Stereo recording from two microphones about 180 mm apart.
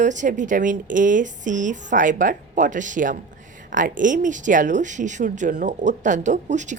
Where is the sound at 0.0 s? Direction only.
45° right (ahead or behind).